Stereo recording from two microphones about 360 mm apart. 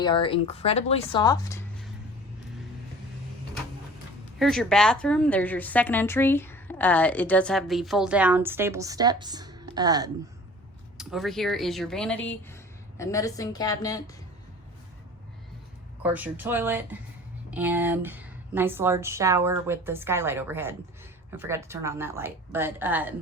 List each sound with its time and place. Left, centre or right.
0.0 s speech: centre
4.4 s a woman's voice: centre
16.0 s a woman's voice: centre